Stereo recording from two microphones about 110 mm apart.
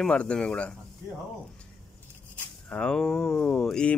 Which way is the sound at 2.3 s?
10° left (ahead or behind).